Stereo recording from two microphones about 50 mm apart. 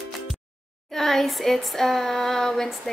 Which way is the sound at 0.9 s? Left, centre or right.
Centre.